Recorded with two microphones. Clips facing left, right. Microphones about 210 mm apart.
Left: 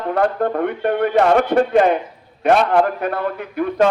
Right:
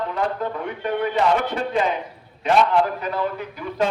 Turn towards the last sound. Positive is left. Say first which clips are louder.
# left 8 dB
turn(degrees=60)  # may be behind; listen again after turning